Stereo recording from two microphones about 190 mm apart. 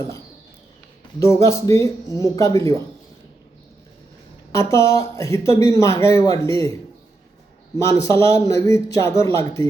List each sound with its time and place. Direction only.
1.2 s speech: 15° left (ahead or behind)
4.5 s speech: 15° left (ahead or behind)
7.9 s speech: 15° left (ahead or behind)